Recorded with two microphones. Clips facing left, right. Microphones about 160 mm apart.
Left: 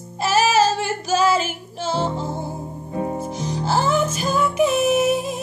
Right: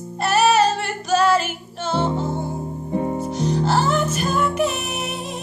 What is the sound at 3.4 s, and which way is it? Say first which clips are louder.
Music: right 2 dB; 65° right (ahead or behind).